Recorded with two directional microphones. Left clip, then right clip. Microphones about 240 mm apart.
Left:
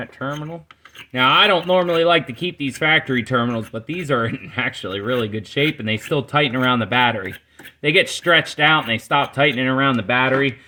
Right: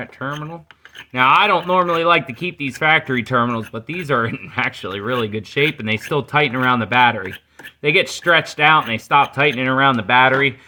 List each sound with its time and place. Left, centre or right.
0.0 s speech: centre